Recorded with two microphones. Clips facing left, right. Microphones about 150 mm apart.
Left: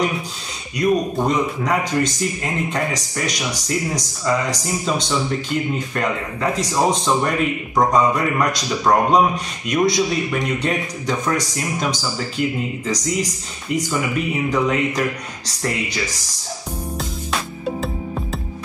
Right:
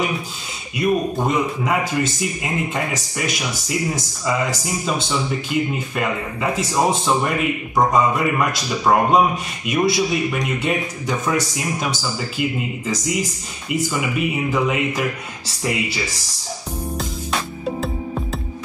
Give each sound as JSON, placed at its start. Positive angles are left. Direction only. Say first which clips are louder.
{"t": 0.7, "sound": "a man's voice", "louder": "left 1 dB", "side_deg": -5}
{"t": 14.5, "sound": "a man's voice", "louder": "left 4 dB", "side_deg": -5}
{"t": 17.6, "sound": "music", "louder": "even", "side_deg": 0}